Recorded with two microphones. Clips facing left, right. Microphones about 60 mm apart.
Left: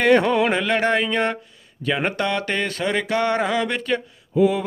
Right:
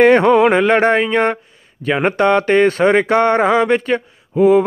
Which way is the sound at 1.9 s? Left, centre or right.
Right.